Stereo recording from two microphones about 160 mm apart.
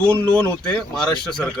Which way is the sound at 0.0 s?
10° left (ahead or behind).